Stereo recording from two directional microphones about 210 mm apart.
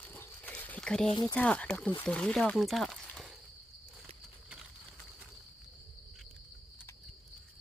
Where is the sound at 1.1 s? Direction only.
20° left (ahead or behind).